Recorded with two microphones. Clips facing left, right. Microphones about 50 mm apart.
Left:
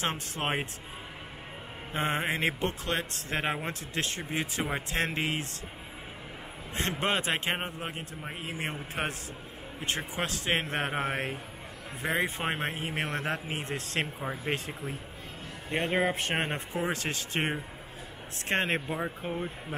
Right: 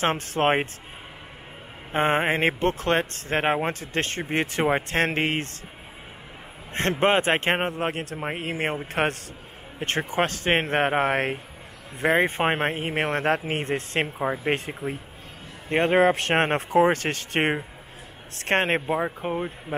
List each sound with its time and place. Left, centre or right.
0.0 s speech: right
1.9 s speech: right
6.7 s speech: right
8.2 s speech: right
16.1 s speech: right
18.9 s speech: right